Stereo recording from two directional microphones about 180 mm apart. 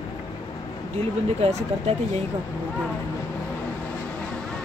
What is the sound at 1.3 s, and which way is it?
Speech, 35° right (ahead or behind).